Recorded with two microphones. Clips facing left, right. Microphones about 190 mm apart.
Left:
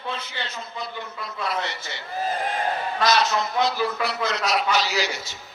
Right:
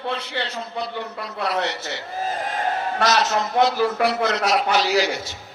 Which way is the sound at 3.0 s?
45° right (ahead or behind).